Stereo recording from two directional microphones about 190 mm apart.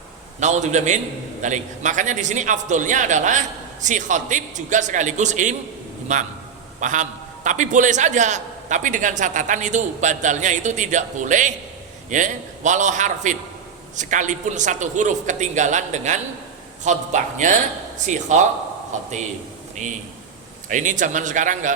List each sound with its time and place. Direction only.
0.3 s a man's voice: 40° right (ahead or behind)